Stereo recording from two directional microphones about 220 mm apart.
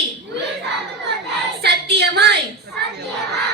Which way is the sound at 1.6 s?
50° right (ahead or behind).